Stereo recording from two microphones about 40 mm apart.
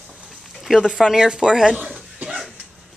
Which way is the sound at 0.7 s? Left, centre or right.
Centre.